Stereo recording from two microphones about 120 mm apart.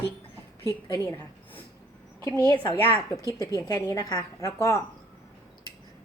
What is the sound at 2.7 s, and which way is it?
Speech, 50° right (ahead or behind).